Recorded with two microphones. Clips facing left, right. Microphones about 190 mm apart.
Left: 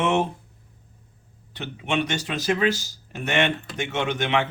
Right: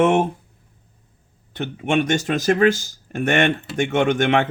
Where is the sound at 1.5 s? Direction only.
50° right (ahead or behind).